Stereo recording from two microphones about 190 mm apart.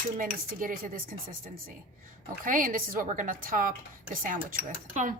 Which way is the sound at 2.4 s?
45° right (ahead or behind).